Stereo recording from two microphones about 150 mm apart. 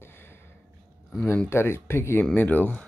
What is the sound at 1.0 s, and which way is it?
Speech, 10° left (ahead or behind).